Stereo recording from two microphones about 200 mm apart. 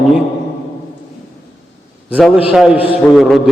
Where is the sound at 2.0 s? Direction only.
5° right (ahead or behind).